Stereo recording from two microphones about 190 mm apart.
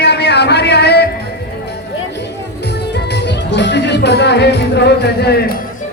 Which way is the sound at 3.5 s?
65° left (ahead or behind).